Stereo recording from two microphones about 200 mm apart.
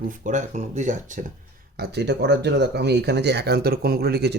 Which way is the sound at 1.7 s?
55° right (ahead or behind).